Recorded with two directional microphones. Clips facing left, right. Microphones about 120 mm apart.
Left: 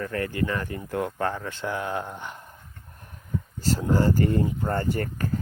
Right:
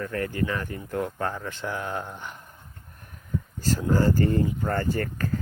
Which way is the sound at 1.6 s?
30° left (ahead or behind).